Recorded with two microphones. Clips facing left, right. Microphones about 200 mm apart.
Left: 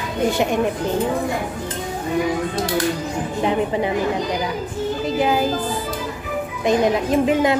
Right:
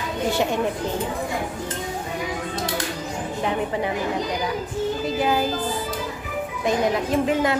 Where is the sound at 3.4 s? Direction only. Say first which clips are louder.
Left 5 dB; 20° left (ahead or behind).